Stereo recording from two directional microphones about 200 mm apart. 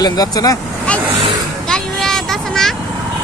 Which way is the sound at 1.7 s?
5° left (ahead or behind).